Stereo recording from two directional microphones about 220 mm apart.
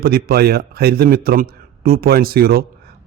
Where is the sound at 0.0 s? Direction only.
45° right (ahead or behind).